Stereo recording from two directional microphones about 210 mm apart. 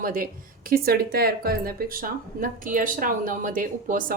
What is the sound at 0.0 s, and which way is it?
A woman's voice, 40° right (ahead or behind).